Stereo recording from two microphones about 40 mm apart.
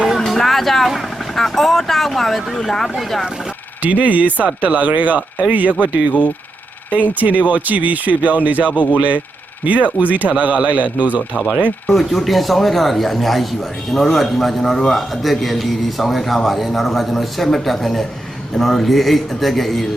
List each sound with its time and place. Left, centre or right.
0.3 s speech: centre
3.0 s a man's voice: centre
3.8 s speech: right
6.1 s speech: left
7.1 s speech: right
8.7 s speech: left
9.0 s speech: right
11.9 s a man's voice: centre